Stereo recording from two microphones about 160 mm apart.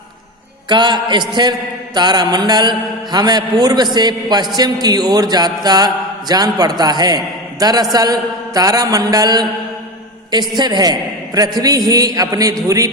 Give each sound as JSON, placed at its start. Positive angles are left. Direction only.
{"t": 0.7, "sound": "a man's voice", "side_deg": -30}
{"t": 10.5, "sound": "a man's voice", "side_deg": -25}